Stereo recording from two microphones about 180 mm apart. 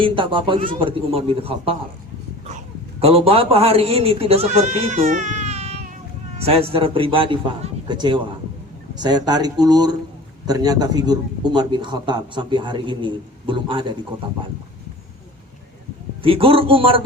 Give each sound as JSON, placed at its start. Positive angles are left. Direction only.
{"t": 0.0, "sound": "speech", "side_deg": -30}
{"t": 3.0, "sound": "speech", "side_deg": -30}
{"t": 16.2, "sound": "speech", "side_deg": -30}